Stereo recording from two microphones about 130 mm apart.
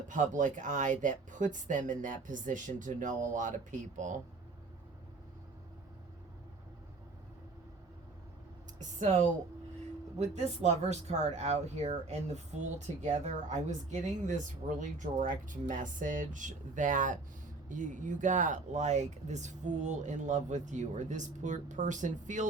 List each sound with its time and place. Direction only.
0.1 s speech: 75° right (ahead or behind)
8.8 s a sound: 70° right (ahead or behind)
10.2 s speech: 60° right (ahead or behind)